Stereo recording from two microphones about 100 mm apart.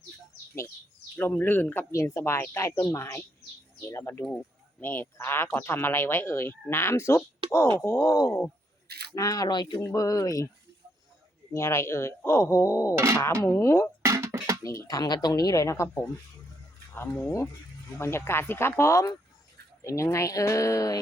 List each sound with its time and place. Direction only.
1.2 s speech: 20° left (ahead or behind)
1.9 s speech: 30° left (ahead or behind); by 9.8 s 50° left (ahead or behind)
9.8 s speech: 35° left (ahead or behind)
11.5 s speech: 30° left (ahead or behind)
14.0 s music: 30° right (ahead or behind)
14.6 s speech: 35° left (ahead or behind)
16.9 s speech: 25° left (ahead or behind)